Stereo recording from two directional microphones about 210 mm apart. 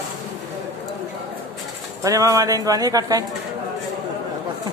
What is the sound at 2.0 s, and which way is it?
Speech, 15° right (ahead or behind).